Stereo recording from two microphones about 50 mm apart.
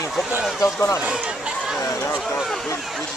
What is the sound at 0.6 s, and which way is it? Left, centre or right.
Speech, left.